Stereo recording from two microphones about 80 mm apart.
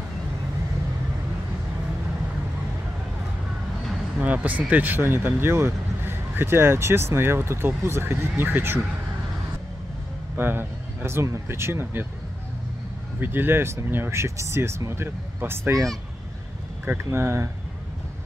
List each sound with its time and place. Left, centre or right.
4.2 s speech: centre
10.3 s speech: right
13.2 s speech: right
16.8 s speech: right